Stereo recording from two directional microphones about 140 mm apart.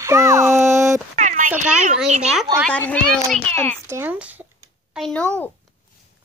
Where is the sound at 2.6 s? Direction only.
10° left (ahead or behind).